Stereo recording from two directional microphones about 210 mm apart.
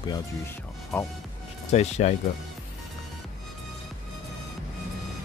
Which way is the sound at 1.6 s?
30° left (ahead or behind).